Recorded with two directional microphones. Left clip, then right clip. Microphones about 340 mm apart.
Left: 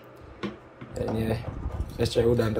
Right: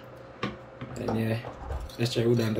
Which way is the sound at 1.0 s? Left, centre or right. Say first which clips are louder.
Left 2 dB; centre.